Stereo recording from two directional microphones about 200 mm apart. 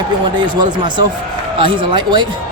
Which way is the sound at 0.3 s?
20° right (ahead or behind).